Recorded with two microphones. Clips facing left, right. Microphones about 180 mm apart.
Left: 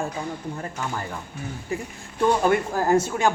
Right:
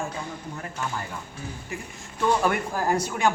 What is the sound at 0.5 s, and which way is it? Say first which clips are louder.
Speech: left 2 dB; 35° left (ahead or behind).